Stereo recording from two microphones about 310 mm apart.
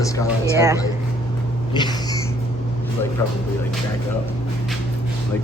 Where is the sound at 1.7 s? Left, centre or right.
Centre.